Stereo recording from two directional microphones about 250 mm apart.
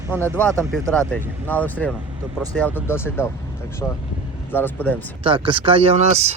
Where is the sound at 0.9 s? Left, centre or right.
Centre.